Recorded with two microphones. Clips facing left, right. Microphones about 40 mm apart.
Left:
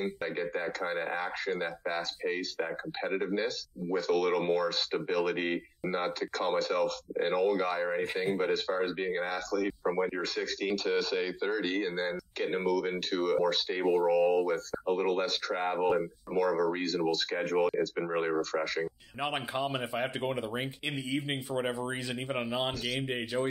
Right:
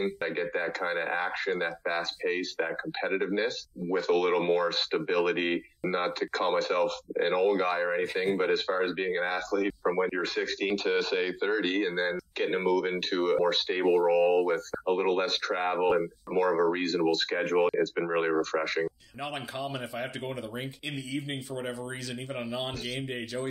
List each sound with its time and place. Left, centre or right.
0.0 s speech: right
19.1 s speech: centre